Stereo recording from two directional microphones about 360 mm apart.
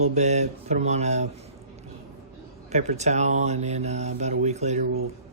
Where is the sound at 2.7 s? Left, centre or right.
Centre.